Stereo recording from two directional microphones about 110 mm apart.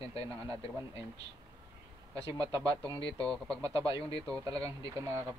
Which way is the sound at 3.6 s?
35° right (ahead or behind).